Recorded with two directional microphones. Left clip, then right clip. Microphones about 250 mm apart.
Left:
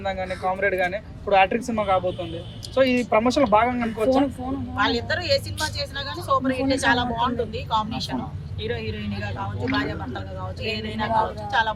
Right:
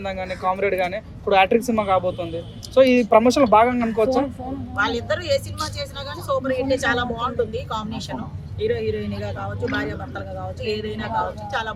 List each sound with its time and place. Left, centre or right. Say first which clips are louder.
0.0 s speech: right 1 dB; right
4.8 s speech: right 1 dB; centre